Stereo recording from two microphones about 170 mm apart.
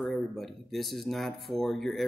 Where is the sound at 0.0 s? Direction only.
Centre (ahead or behind).